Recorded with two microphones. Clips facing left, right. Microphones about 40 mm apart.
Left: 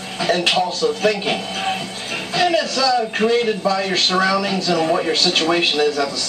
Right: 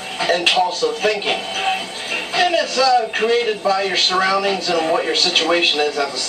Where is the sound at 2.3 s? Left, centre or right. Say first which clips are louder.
Even; centre.